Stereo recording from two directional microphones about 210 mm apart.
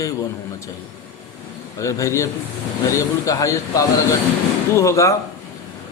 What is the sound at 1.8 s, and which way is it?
Speech, 15° left (ahead or behind).